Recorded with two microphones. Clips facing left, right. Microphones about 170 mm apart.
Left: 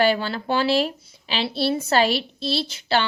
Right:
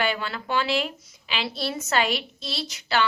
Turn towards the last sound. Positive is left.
turn(degrees=30)  # may be behind; listen again after turning